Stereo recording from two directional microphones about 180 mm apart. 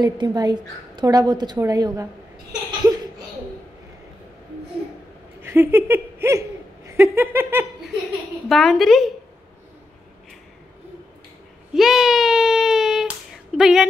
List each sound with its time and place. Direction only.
0.0 s a woman's voice: 20° right (ahead or behind)
2.8 s laughter: 20° right (ahead or behind)
5.4 s speech: 15° right (ahead or behind)
6.2 s a sound: 15° right (ahead or behind)
8.5 s a woman's voice: centre (ahead or behind)
11.7 s child singing: centre (ahead or behind)
13.6 s speech: 5° right (ahead or behind)